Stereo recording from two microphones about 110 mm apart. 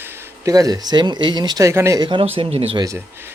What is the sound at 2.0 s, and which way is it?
Speech, 50° right (ahead or behind).